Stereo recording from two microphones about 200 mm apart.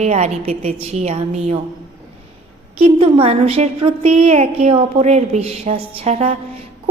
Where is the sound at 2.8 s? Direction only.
30° right (ahead or behind).